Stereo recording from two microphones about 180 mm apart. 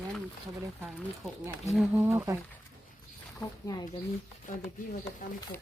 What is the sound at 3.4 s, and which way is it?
Speech, 20° left (ahead or behind).